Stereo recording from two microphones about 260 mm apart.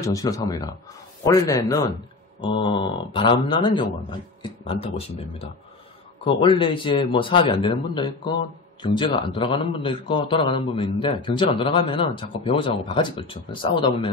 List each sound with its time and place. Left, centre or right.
0.0 s a man's voice: centre